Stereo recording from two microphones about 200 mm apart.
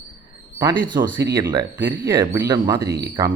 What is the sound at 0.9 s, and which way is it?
A man's voice, 15° right (ahead or behind).